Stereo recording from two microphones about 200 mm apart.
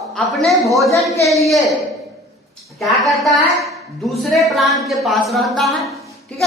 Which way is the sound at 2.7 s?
Centre (ahead or behind).